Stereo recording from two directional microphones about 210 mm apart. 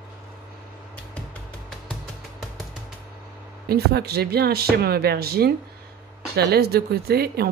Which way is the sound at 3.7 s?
50° right (ahead or behind).